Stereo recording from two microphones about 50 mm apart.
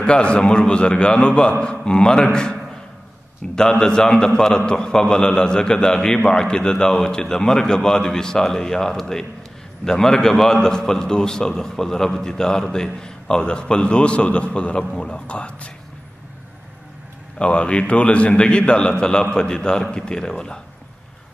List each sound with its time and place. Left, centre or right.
0.0 s a man's voice: left
3.5 s a man's voice: centre
17.4 s a man's voice: left